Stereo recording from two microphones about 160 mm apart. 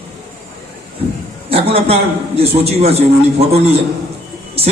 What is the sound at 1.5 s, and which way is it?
A man's voice, 35° right (ahead or behind).